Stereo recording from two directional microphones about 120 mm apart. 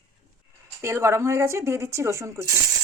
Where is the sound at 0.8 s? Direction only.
25° right (ahead or behind).